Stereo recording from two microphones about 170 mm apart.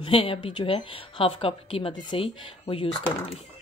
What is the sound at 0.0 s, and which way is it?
A woman's voice, 35° left (ahead or behind).